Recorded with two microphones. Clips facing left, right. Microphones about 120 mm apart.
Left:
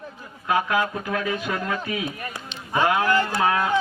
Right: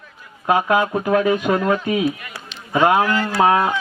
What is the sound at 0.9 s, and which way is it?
Speech, 35° right (ahead or behind).